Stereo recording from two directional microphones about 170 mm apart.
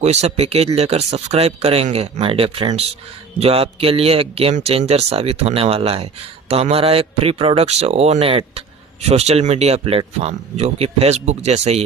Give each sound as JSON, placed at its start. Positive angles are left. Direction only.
{"t": 0.0, "sound": "a man's voice", "side_deg": -40}